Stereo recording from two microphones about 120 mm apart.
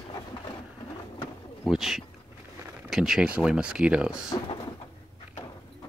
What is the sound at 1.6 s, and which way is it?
Speech, centre (ahead or behind).